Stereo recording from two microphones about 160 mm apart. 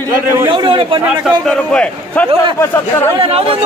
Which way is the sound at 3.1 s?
35° right (ahead or behind).